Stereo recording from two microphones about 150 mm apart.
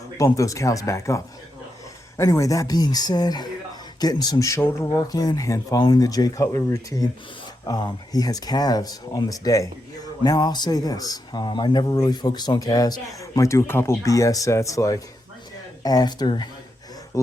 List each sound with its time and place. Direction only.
0.3 s speech: 20° left (ahead or behind)